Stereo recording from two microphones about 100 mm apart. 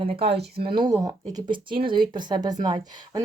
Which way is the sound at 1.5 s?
55° right (ahead or behind).